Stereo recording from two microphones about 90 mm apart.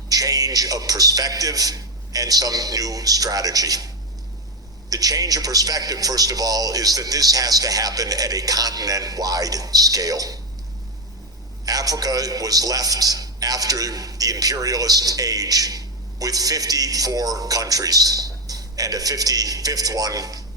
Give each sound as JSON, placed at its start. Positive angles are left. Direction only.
{"t": 0.1, "sound": "a man's voice", "side_deg": -45}
{"t": 4.9, "sound": "a man's voice", "side_deg": -45}
{"t": 11.6, "sound": "a man's voice", "side_deg": -45}